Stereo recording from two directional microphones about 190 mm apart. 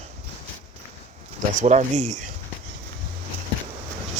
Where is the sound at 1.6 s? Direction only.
40° right (ahead or behind).